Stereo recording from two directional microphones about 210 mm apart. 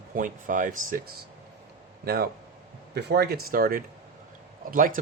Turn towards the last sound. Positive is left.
turn(degrees=-40)  # may be behind; listen again after turning